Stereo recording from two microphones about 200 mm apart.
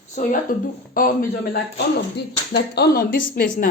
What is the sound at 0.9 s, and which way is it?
Speech, 45° left (ahead or behind).